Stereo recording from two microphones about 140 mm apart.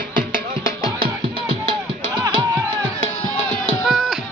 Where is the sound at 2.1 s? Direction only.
35° right (ahead or behind).